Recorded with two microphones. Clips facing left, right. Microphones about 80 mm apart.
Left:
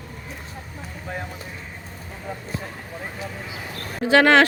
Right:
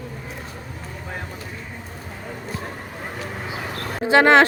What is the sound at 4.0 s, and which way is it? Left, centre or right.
Speech, right.